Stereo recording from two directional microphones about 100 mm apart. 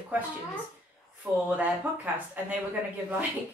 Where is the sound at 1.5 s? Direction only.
15° right (ahead or behind).